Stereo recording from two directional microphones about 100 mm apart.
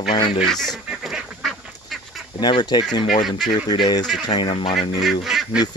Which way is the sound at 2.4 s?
45° left (ahead or behind).